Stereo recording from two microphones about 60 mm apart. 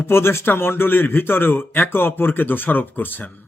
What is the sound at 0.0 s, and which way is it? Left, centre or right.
Speech, left.